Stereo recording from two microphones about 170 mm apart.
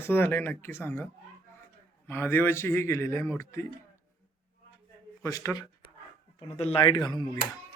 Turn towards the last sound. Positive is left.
turn(degrees=25)  # may be behind; listen again after turning